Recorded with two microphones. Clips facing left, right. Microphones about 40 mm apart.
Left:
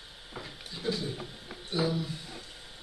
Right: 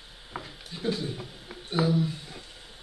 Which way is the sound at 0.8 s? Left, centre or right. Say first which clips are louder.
Right 3 dB; right.